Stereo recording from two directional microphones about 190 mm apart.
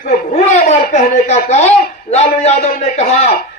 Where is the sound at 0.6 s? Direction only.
35° left (ahead or behind).